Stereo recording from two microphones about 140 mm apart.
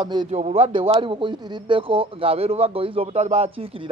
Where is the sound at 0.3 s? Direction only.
50° right (ahead or behind).